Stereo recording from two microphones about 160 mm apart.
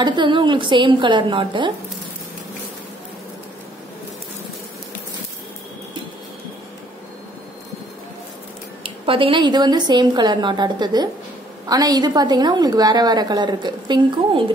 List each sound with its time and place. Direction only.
0.0 s a woman's voice: 30° right (ahead or behind)
8.8 s a woman's voice: 35° right (ahead or behind)